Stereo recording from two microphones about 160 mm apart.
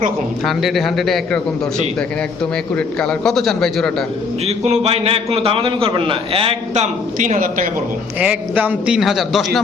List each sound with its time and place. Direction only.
0.4 s a man's voice: centre (ahead or behind)
2.7 s a man's voice: 5° left (ahead or behind)
4.4 s a man's voice: 40° right (ahead or behind)
7.2 s speech: 55° right (ahead or behind)
8.2 s a man's voice: 10° right (ahead or behind)